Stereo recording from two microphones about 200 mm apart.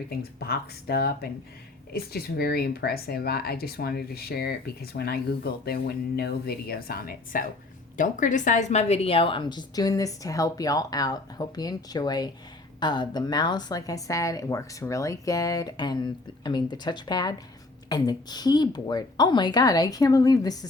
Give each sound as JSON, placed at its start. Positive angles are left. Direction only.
{"t": 0.2, "sound": "a woman's voice", "side_deg": 50}